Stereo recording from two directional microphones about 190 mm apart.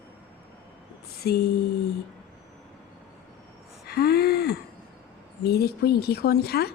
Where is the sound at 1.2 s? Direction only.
55° left (ahead or behind).